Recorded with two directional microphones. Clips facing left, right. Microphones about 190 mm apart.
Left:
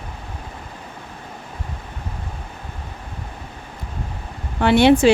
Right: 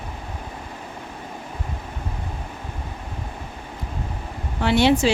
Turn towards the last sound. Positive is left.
turn(degrees=55)  # may be behind; listen again after turning